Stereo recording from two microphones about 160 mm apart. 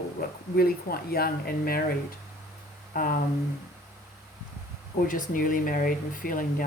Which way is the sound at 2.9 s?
60° left (ahead or behind).